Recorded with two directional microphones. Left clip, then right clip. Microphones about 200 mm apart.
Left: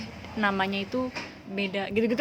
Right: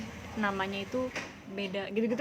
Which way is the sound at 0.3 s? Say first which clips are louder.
Left 6 dB; 25° left (ahead or behind).